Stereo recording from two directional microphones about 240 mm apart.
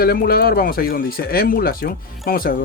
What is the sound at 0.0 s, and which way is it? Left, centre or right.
Speech, left.